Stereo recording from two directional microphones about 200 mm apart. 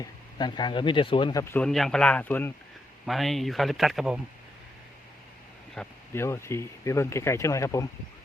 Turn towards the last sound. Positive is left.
turn(degrees=15)  # may be behind; listen again after turning